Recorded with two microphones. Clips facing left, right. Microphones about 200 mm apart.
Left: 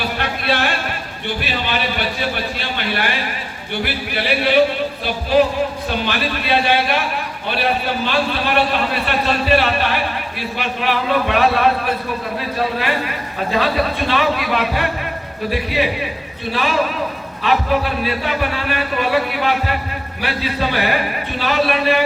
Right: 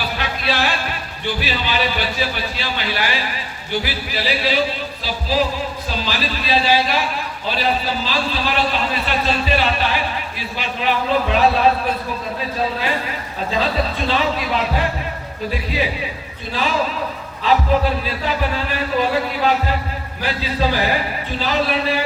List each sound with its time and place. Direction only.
0.2 s a sound: 55° left (ahead or behind)
1.4 s a man's voice: 55° left (ahead or behind)
13.5 s a man's voice: 65° left (ahead or behind)
18.0 s a man's voice: 65° left (ahead or behind)